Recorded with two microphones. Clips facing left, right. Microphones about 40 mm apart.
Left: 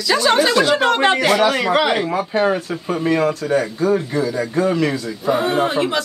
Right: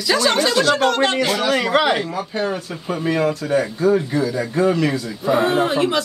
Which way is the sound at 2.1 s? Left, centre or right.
Centre.